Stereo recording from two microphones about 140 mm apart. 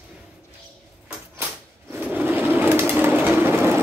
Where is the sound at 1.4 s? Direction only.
15° right (ahead or behind).